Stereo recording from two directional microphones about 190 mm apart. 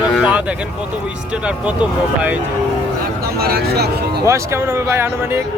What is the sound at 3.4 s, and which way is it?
Speech, 55° right (ahead or behind).